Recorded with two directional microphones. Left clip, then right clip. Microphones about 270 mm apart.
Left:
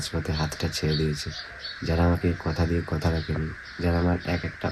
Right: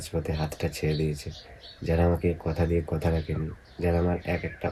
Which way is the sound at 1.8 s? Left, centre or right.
Centre.